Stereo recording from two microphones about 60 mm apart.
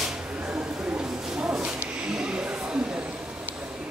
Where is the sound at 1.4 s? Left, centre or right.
Centre.